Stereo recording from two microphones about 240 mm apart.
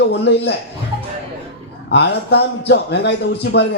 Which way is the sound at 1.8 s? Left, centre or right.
Left.